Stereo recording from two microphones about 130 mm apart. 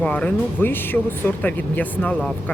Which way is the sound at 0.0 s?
10° left (ahead or behind).